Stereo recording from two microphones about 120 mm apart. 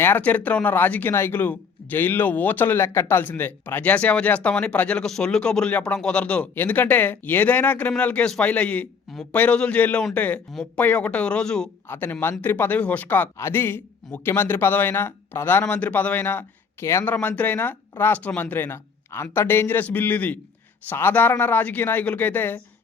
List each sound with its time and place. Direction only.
0.0 s speech: 15° left (ahead or behind)